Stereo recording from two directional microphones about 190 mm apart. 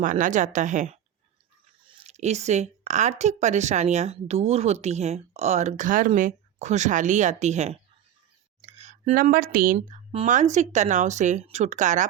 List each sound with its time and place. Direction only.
0.0 s speech: 40° right (ahead or behind)
9.7 s speech: 35° right (ahead or behind)